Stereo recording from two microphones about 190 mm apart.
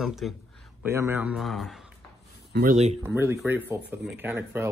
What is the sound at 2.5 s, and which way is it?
Speech, 50° right (ahead or behind).